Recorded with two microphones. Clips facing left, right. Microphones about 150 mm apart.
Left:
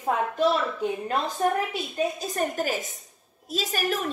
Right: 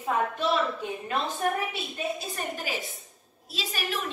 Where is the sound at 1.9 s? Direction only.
40° left (ahead or behind).